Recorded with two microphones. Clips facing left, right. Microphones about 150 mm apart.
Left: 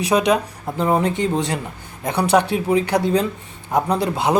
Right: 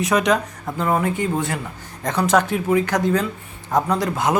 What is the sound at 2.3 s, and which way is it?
Speech, 15° left (ahead or behind).